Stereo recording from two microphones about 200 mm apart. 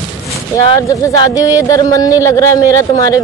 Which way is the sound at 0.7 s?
15° left (ahead or behind).